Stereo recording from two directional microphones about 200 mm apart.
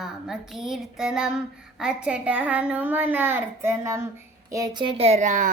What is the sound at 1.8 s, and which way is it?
A child's voice, 5° right (ahead or behind).